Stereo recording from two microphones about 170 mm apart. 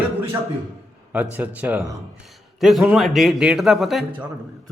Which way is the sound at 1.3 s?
10° right (ahead or behind).